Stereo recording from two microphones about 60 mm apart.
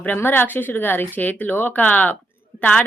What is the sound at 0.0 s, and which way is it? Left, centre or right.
A woman's voice, left.